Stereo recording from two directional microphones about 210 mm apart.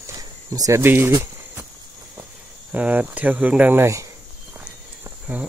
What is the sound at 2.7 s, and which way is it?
Speech, 5° right (ahead or behind).